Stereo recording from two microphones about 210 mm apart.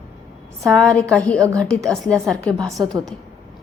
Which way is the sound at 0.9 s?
5° left (ahead or behind).